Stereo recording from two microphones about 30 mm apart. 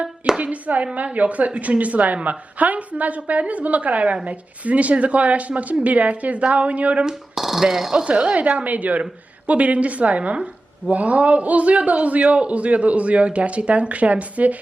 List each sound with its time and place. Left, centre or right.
0.3 s a man's voice: right
7.3 s speech: centre
8.2 s a man's voice: right
10.9 s a man's voice: right